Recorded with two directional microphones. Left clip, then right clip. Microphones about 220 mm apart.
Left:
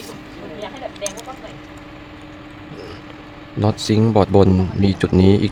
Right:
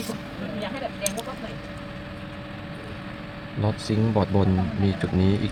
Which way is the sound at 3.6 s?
50° left (ahead or behind).